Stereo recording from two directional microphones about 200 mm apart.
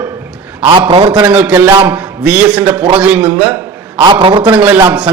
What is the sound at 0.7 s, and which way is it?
Speech, 25° right (ahead or behind).